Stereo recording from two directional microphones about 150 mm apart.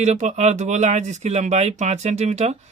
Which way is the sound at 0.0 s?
50° right (ahead or behind).